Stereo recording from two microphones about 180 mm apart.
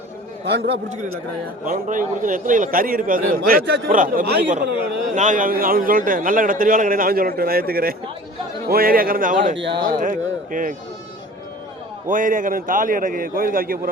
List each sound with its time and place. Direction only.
0.4 s a man's voice: 70° right (ahead or behind)
1.6 s a man's voice: 45° right (ahead or behind)
5.1 s a man's voice: 45° right (ahead or behind)
12.0 s a man's voice: 50° right (ahead or behind)